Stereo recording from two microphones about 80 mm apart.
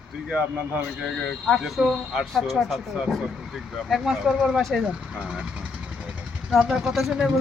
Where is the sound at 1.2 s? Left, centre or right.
Centre.